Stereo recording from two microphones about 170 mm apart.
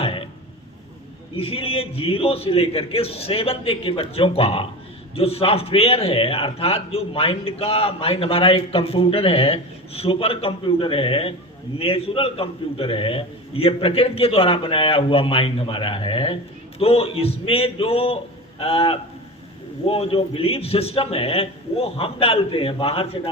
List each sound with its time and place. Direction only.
0.0 s throat clearing: 30° left (ahead or behind)
1.4 s a man's voice: 35° left (ahead or behind)